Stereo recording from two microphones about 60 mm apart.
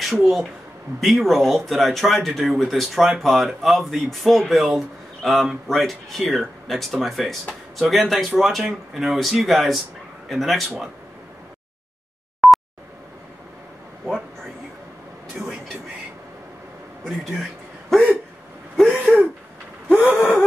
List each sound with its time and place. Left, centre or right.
0.0 s speech: centre
12.4 s dial tone: centre
17.4 s a sound: centre
18.8 s throat clearing: centre
20.1 s gasp: left